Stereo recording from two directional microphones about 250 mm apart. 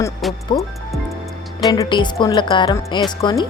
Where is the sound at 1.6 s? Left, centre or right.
Centre.